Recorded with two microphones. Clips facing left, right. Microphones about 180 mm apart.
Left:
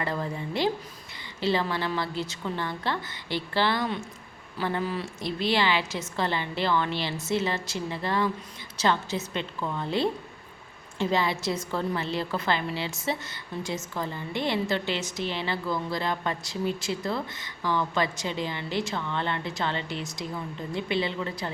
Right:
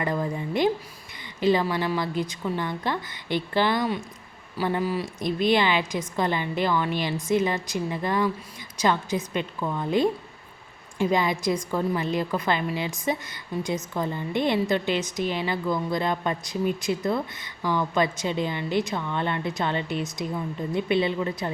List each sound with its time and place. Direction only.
0.0 s a woman's voice: 15° right (ahead or behind)